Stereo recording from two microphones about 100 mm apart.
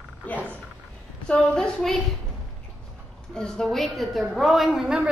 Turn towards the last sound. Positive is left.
turn(degrees=-5)  # may be behind; listen again after turning